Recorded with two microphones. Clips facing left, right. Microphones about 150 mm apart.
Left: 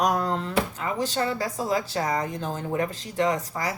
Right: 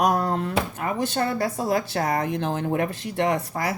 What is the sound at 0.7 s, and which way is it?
Speech, 55° right (ahead or behind).